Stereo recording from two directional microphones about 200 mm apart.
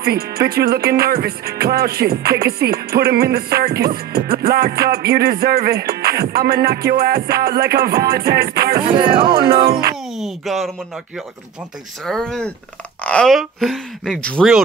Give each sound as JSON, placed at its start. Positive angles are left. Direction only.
{"t": 0.0, "sound": "music", "side_deg": -50}
{"t": 8.9, "sound": "speech", "side_deg": -25}
{"t": 9.5, "sound": "music", "side_deg": -50}
{"t": 10.1, "sound": "speech", "side_deg": 0}
{"t": 12.0, "sound": "speech", "side_deg": 0}